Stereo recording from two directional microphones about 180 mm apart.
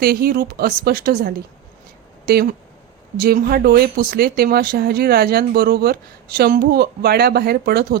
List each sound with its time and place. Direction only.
0.0 s speech: 55° right (ahead or behind)